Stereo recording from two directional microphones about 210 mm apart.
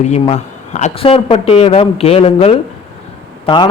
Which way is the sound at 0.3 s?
35° left (ahead or behind).